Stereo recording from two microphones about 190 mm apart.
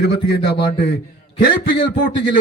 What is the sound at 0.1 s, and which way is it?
Speech, 60° left (ahead or behind).